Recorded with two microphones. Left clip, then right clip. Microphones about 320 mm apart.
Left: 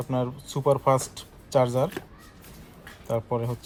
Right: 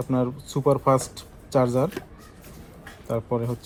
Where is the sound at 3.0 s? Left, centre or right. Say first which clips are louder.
Right 1 dB; left.